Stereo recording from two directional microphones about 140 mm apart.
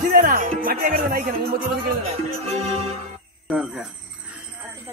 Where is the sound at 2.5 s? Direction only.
45° right (ahead or behind).